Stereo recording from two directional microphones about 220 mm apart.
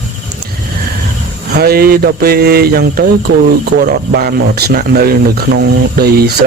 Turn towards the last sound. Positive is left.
turn(degrees=-45)  # may be behind; listen again after turning